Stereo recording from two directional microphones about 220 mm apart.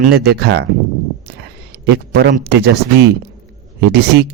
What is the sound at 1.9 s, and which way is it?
Speech, 50° right (ahead or behind).